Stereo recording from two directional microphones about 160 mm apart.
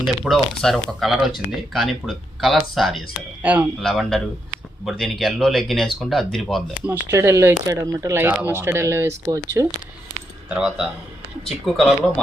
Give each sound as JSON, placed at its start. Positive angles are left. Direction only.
{"t": 0.3, "sound": "speech", "side_deg": 0}
{"t": 3.8, "sound": "speech", "side_deg": 0}
{"t": 6.8, "sound": "speech", "side_deg": -15}
{"t": 10.5, "sound": "speech", "side_deg": -5}